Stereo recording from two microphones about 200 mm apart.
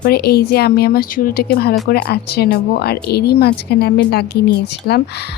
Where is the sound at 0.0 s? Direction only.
50° left (ahead or behind).